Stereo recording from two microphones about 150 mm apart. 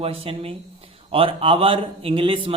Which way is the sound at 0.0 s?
40° right (ahead or behind).